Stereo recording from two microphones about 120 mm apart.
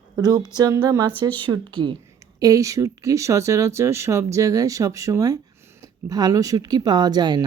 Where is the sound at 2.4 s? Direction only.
30° right (ahead or behind).